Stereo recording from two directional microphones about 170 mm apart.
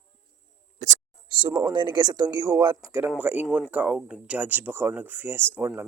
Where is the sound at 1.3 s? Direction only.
30° right (ahead or behind).